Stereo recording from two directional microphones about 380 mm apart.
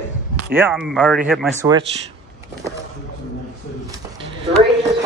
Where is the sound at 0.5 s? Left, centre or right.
Centre.